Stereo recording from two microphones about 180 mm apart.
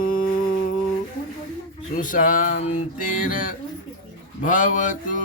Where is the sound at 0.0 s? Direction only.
50° left (ahead or behind).